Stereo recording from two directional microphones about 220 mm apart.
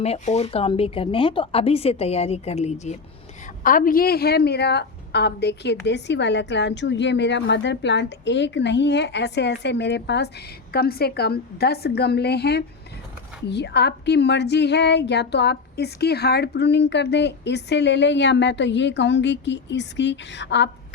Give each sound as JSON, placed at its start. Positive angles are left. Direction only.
{"t": 0.0, "sound": "a woman's voice", "side_deg": 30}